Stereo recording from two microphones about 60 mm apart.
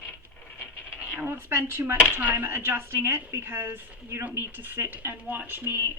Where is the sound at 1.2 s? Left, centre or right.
Right.